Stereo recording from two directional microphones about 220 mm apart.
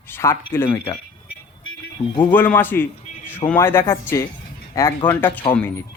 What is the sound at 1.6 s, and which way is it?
Music, 65° left (ahead or behind).